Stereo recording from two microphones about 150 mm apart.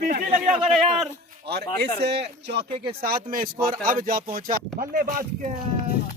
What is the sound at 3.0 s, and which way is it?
A man's voice, 70° right (ahead or behind).